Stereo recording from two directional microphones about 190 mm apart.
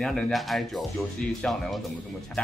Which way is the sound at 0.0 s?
Centre (ahead or behind).